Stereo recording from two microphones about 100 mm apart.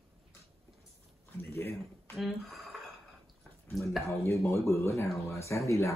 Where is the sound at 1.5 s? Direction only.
25° left (ahead or behind).